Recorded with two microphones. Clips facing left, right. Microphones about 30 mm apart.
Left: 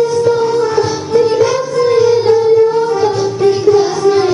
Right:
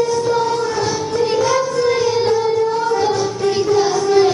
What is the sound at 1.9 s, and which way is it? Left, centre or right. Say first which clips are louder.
Music: left 7 dB; centre.